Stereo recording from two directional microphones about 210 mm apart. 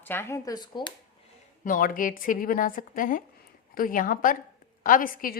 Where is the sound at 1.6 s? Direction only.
40° left (ahead or behind).